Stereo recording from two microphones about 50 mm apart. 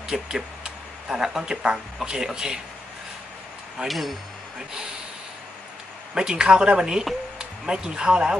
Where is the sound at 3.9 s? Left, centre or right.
Centre.